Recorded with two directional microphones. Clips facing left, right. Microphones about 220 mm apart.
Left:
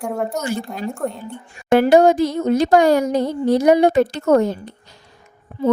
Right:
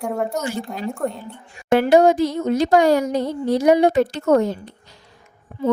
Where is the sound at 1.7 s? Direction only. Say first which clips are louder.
Left 2 dB; 45° left (ahead or behind).